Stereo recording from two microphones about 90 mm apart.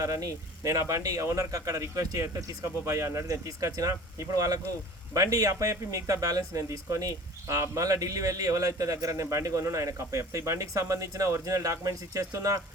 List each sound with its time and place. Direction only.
0.0 s speech: 40° right (ahead or behind)